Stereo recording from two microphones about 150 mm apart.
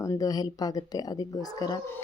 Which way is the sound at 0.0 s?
20° left (ahead or behind).